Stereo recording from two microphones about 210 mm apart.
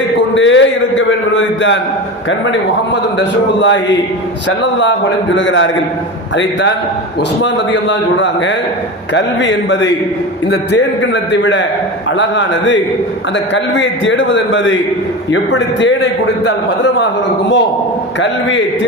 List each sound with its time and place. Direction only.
0.3 s a man's voice: 65° left (ahead or behind)
18.2 s a man's voice: 60° left (ahead or behind)